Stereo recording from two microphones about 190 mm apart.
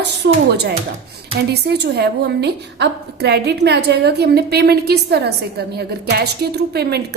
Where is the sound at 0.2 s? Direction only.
60° right (ahead or behind).